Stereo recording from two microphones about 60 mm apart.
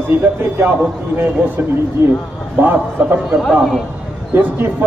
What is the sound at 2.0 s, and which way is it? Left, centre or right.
Speech, right.